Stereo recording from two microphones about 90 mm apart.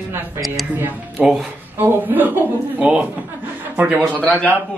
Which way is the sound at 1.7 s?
20° right (ahead or behind).